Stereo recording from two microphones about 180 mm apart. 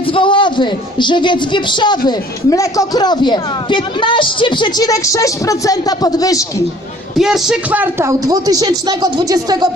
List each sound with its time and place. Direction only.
0.1 s a man's voice: 30° left (ahead or behind)
7.2 s speech: centre (ahead or behind); by 9.6 s 20° right (ahead or behind)